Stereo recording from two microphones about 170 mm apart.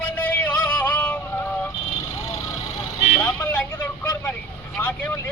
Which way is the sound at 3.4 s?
15° left (ahead or behind).